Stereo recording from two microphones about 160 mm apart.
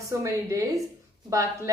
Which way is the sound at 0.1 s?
20° right (ahead or behind).